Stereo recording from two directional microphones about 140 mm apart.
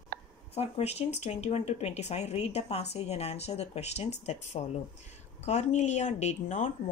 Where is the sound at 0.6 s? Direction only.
50° left (ahead or behind).